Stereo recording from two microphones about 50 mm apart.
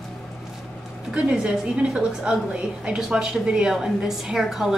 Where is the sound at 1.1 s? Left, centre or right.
Right.